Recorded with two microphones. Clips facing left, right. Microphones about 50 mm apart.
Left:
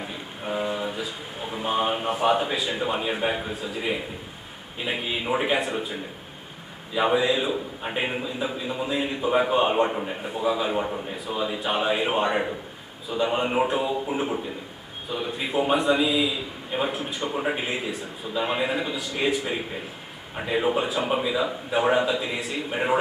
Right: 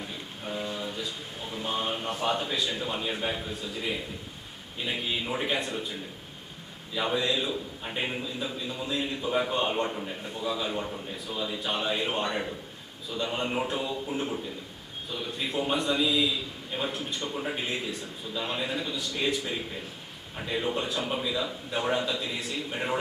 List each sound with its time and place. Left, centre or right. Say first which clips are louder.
0.0 s a sound: left 4 dB; left
2.6 s a man's voice: left 5 dB; centre
6.9 s a man's voice: left 6 dB; left
17.2 s a man's voice: left 7 dB; left
17.7 s a man's voice: left 4 dB; centre